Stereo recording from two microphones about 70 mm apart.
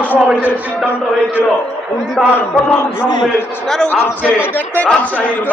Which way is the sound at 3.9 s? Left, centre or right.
Left.